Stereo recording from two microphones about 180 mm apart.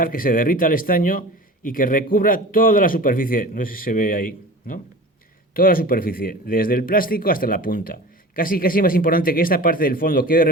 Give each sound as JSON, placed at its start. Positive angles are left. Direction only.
{"t": 0.0, "sound": "speech", "side_deg": 50}